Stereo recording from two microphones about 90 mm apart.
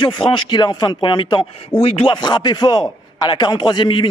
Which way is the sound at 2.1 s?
55° left (ahead or behind).